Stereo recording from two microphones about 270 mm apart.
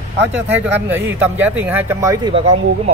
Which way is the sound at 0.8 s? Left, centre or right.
Centre.